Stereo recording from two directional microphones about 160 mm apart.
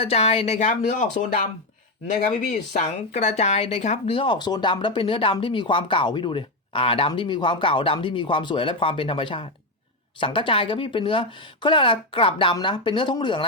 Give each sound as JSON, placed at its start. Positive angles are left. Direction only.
{"t": 0.0, "sound": "speech", "side_deg": 40}
{"t": 2.0, "sound": "speech", "side_deg": 50}